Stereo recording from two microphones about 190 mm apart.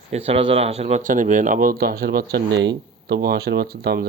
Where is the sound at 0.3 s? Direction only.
30° right (ahead or behind).